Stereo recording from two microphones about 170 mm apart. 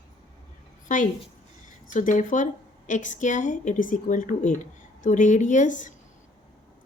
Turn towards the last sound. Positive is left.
turn(degrees=45)  # may be behind; listen again after turning